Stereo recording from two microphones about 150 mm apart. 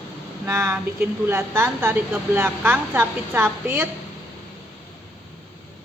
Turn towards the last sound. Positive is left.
turn(degrees=-15)  # may be behind; listen again after turning